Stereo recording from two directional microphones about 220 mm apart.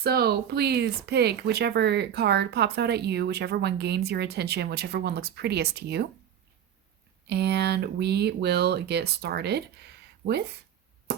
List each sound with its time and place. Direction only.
0.0 s speech: 45° right (ahead or behind)
7.3 s speech: 50° right (ahead or behind)